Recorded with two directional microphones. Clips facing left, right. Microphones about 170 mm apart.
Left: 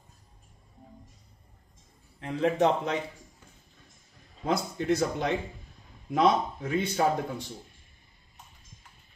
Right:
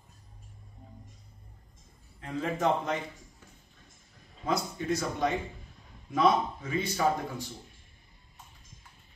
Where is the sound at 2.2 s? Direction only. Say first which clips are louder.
Left 5 dB; 70° left (ahead or behind).